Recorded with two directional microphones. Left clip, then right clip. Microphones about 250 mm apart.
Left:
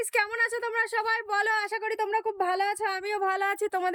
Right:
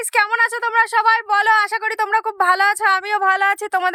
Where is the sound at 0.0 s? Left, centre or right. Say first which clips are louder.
Right 10 dB; centre.